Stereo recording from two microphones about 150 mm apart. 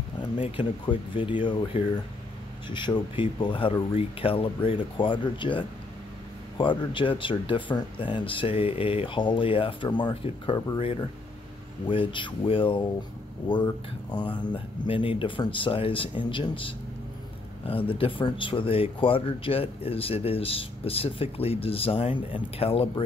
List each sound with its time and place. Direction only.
0.6 s speech: 35° left (ahead or behind)